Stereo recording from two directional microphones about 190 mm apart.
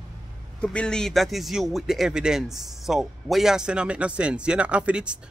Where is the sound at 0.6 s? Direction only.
5° left (ahead or behind).